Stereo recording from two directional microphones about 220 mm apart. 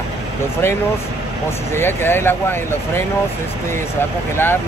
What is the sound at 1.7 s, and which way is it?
Speech, 10° left (ahead or behind).